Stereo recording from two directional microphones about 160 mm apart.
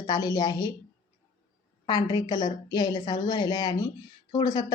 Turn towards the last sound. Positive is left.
turn(degrees=25)  # may be behind; listen again after turning